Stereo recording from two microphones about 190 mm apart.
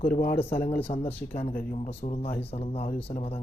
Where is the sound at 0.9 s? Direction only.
35° left (ahead or behind).